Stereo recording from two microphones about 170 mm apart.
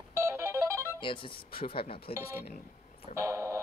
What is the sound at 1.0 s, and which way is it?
Speech, 30° left (ahead or behind).